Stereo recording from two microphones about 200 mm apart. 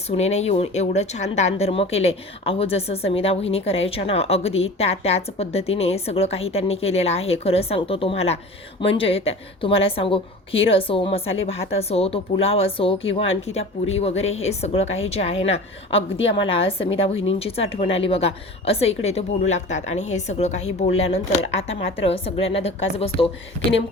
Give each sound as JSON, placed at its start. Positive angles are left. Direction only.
{"t": 0.1, "sound": "a woman's voice", "side_deg": 35}
{"t": 21.7, "sound": "a woman's voice", "side_deg": 75}
{"t": 22.0, "sound": "a woman's voice", "side_deg": 30}